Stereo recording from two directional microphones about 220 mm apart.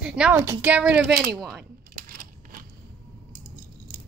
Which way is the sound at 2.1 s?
40° right (ahead or behind).